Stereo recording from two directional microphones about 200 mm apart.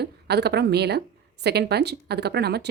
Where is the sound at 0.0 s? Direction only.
55° right (ahead or behind).